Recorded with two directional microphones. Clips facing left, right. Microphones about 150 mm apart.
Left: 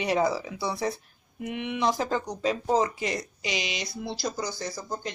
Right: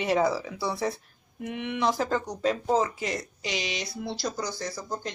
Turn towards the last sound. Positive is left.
turn(degrees=10)  # may be behind; listen again after turning